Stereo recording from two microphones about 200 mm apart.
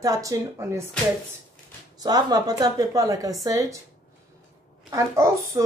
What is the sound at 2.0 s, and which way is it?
Speech, 20° right (ahead or behind).